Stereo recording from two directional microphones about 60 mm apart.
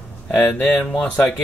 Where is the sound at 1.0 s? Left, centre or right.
Left.